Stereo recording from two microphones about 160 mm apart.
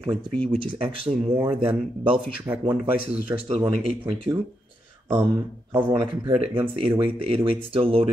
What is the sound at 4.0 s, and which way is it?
Speech, 35° right (ahead or behind).